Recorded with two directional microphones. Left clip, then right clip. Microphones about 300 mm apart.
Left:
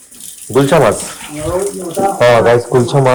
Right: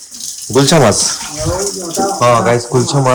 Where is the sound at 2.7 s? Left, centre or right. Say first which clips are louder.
Left 3 dB; centre.